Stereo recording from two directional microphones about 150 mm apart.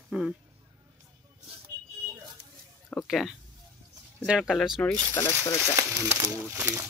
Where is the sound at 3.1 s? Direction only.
Centre (ahead or behind).